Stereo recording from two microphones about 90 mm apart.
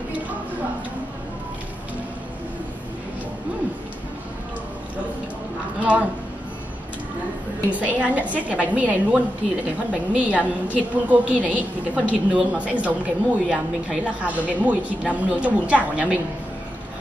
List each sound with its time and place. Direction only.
5.8 s a woman's voice: 15° right (ahead or behind)
7.7 s a woman's voice: 15° right (ahead or behind)